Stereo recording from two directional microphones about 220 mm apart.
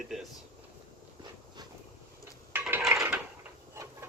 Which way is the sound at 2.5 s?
10° right (ahead or behind).